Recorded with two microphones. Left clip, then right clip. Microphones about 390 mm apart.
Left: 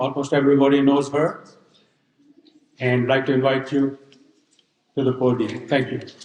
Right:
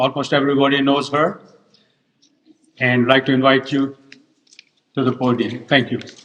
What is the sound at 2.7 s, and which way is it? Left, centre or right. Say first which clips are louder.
Speech: right 5 dB; right.